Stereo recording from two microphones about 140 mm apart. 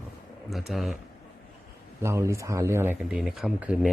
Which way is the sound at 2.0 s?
20° right (ahead or behind).